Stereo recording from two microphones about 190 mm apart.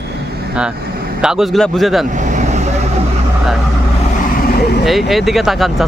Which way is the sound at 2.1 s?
40° right (ahead or behind).